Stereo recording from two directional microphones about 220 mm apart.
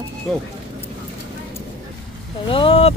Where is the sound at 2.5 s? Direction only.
25° left (ahead or behind).